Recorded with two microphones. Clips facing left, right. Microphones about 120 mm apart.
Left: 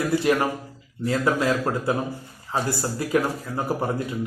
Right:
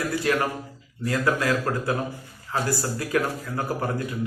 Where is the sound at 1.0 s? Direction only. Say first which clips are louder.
Left 2 dB; 20° left (ahead or behind).